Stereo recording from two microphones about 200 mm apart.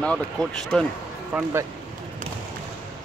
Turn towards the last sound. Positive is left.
turn(degrees=-15)  # may be behind; listen again after turning